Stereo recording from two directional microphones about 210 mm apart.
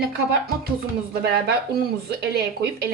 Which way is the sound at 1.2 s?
50° right (ahead or behind).